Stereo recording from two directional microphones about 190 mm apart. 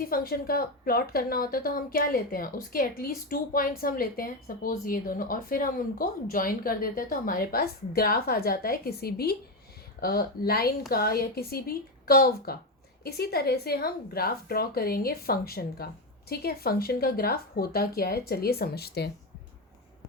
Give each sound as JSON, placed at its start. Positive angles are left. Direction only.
{"t": 0.0, "sound": "a woman's voice", "side_deg": 50}